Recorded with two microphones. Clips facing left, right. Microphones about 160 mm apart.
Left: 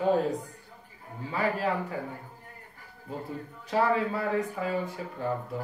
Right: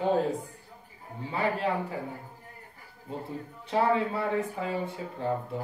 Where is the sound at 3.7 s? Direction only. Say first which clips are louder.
Even; 25° right (ahead or behind).